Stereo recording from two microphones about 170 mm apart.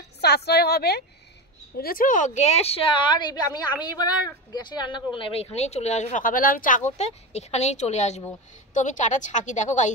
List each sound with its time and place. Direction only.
0.2 s a woman's voice: 70° left (ahead or behind)
1.8 s a woman's voice: 60° left (ahead or behind)
7.0 s a woman's voice: 40° left (ahead or behind)